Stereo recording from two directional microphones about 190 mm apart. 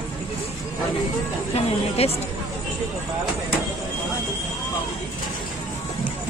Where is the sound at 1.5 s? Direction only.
30° left (ahead or behind).